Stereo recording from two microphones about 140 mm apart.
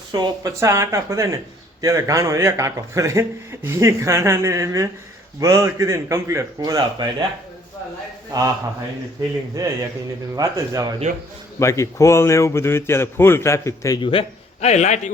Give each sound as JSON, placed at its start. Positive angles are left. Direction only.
{"t": 0.1, "sound": "a man's voice", "side_deg": -25}
{"t": 8.3, "sound": "a man's voice", "side_deg": -25}
{"t": 9.6, "sound": "a man's voice", "side_deg": -25}
{"t": 11.6, "sound": "speech", "side_deg": 20}
{"t": 14.0, "sound": "a man's voice", "side_deg": 40}